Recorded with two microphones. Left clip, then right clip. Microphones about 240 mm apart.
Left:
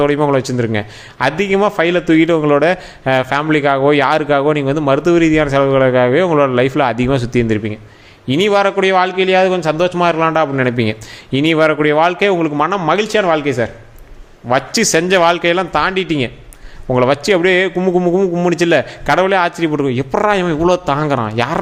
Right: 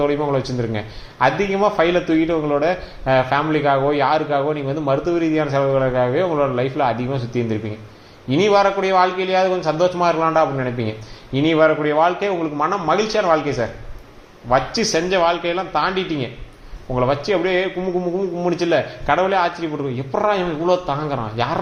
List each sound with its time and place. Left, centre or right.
0.0 s a man's voice: left